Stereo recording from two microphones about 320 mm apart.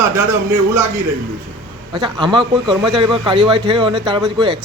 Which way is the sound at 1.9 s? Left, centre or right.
Centre.